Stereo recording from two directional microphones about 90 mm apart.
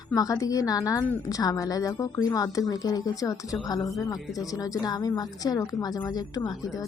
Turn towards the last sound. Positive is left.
turn(degrees=45)  # may be behind; listen again after turning